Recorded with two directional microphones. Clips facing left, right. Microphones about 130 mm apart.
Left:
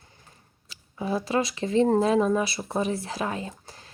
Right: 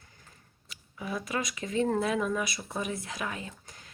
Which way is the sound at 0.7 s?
30° left (ahead or behind).